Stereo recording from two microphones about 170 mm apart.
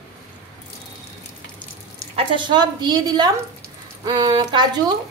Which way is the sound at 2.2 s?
30° right (ahead or behind).